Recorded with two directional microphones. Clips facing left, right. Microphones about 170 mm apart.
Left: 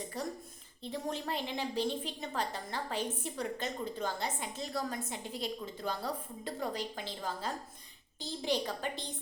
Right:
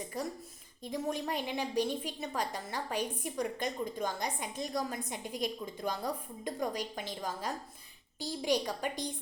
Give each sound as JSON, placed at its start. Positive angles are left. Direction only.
{"t": 0.1, "sound": "a woman's voice", "side_deg": -10}